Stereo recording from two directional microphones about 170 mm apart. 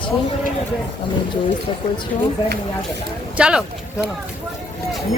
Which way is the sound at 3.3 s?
5° right (ahead or behind).